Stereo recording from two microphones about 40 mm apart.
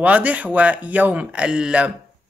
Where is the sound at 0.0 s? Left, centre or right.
Right.